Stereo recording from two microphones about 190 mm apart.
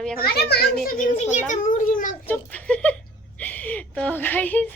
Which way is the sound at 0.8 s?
45° left (ahead or behind).